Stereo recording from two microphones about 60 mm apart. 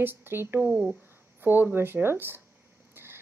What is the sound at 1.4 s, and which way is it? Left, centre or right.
Speech, right.